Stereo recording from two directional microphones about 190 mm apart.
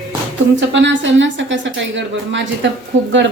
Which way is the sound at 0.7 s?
75° right (ahead or behind).